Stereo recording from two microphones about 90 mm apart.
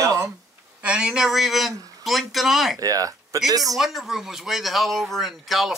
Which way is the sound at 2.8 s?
40° right (ahead or behind).